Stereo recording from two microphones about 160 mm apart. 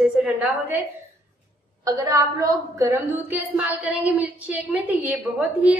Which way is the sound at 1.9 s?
20° right (ahead or behind).